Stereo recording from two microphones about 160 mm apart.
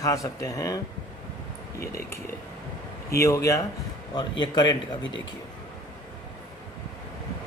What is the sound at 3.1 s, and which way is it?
Speech, 20° left (ahead or behind).